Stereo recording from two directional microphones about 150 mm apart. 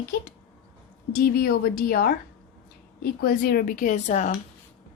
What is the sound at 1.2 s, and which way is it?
A woman's voice, 90° left.